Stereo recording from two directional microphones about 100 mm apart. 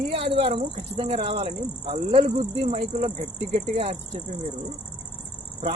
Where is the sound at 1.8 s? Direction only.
70° right (ahead or behind); by 4.2 s 90° right.